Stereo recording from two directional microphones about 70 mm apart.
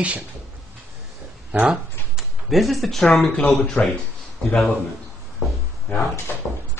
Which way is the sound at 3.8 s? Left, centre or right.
Centre.